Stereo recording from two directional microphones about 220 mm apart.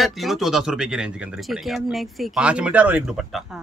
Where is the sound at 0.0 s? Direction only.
Centre (ahead or behind).